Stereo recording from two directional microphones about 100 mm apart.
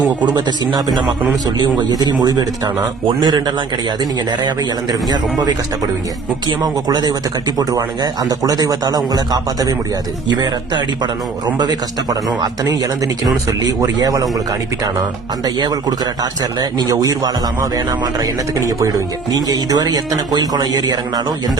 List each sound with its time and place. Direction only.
0.3 s speech: 45° right (ahead or behind)
15.4 s speech: 40° right (ahead or behind)